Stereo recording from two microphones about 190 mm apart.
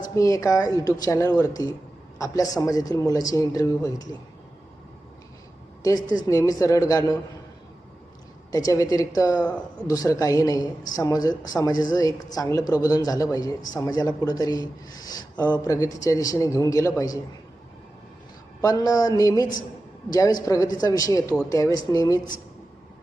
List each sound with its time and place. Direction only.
0.2 s a woman's voice: 15° left (ahead or behind)
6.2 s speech: 15° left (ahead or behind)
8.5 s a woman's voice: 20° left (ahead or behind)
18.6 s a woman's voice: 20° left (ahead or behind)